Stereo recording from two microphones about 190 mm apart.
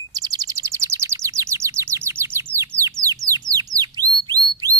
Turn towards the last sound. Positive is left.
turn(degrees=-20)  # may be behind; listen again after turning